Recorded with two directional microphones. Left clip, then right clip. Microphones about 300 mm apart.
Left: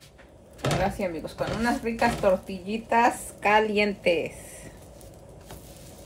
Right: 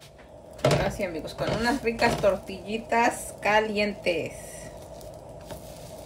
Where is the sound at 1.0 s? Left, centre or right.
Centre.